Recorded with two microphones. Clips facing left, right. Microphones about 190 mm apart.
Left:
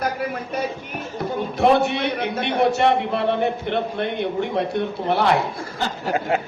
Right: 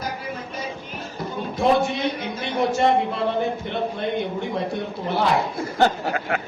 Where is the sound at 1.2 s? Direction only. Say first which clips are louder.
Left 3 dB; 65° left (ahead or behind).